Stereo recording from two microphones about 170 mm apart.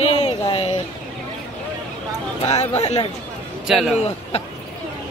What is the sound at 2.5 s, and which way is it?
Speech, 40° left (ahead or behind).